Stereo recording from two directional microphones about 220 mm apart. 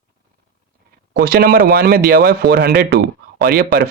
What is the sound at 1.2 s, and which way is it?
A man's voice, 45° right (ahead or behind).